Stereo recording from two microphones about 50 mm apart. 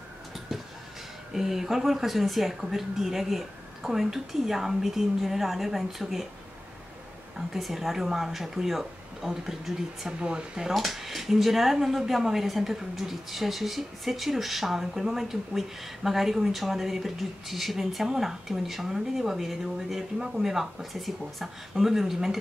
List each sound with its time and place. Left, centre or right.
1.3 s speech: centre
7.3 s speech: centre
10.0 s speech: centre
10.7 s speech: centre